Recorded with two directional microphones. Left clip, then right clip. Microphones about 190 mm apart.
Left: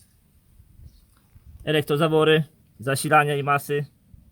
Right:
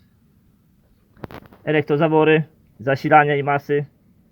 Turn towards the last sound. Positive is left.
turn(degrees=10)  # may be behind; listen again after turning